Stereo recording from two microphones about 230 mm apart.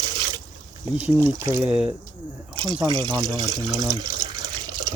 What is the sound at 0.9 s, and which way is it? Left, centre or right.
Speech, centre.